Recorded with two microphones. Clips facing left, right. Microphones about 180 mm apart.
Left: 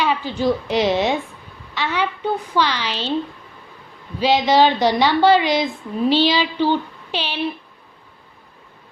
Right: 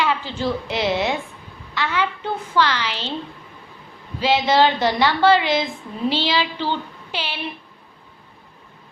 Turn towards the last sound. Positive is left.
turn(degrees=15)  # may be behind; listen again after turning